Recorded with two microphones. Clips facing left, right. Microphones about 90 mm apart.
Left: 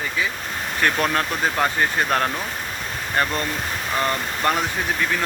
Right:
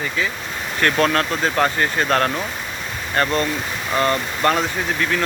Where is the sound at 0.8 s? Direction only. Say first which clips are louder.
Right 3 dB; 10° left (ahead or behind).